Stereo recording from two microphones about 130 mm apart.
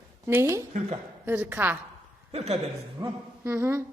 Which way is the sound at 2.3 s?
55° right (ahead or behind).